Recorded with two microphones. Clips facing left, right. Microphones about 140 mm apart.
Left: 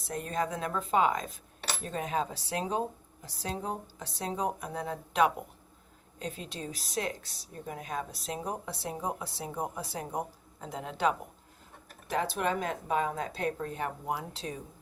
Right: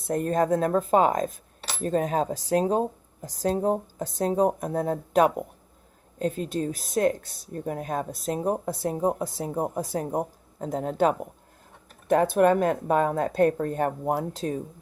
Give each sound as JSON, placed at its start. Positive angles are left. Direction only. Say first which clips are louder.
{"t": 0.0, "sound": "speech", "louder": "right 9 dB", "side_deg": -50}